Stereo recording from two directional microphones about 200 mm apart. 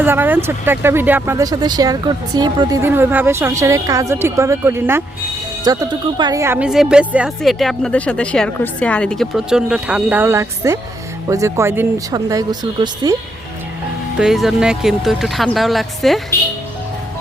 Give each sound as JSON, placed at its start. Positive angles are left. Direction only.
{"t": 0.0, "sound": "speech", "side_deg": -10}
{"t": 14.2, "sound": "speech", "side_deg": 0}